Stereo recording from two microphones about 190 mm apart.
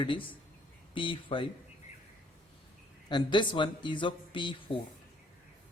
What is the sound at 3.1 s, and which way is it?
Speech, 25° left (ahead or behind).